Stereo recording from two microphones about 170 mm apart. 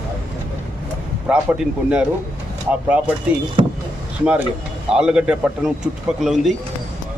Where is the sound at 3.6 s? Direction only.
30° right (ahead or behind).